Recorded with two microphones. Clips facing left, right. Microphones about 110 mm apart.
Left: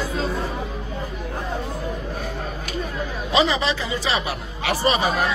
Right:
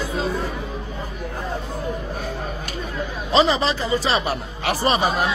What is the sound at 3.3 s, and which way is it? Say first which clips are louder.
Speech: right 2 dB; 35° right (ahead or behind).